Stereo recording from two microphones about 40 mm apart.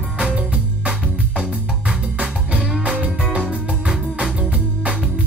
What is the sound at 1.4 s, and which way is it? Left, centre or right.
Music, right.